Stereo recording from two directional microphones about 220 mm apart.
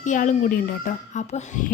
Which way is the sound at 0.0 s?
35° left (ahead or behind).